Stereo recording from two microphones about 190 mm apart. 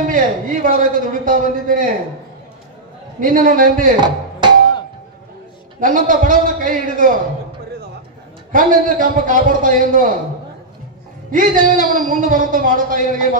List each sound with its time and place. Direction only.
0.1 s a man's voice: 45° right (ahead or behind)
3.2 s a man's voice: 45° right (ahead or behind)
4.0 s tabla: 25° right (ahead or behind)
5.8 s a man's voice: 45° right (ahead or behind)
8.5 s a man's voice: 45° right (ahead or behind)
11.3 s a man's voice: 45° right (ahead or behind)